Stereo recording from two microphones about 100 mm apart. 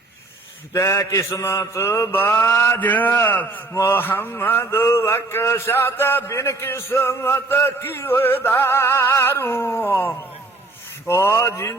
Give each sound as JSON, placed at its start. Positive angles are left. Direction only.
{"t": 0.7, "sound": "mantra", "side_deg": 30}
{"t": 11.1, "sound": "mantra", "side_deg": 30}